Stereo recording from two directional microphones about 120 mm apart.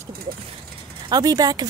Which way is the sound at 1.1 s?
30° right (ahead or behind).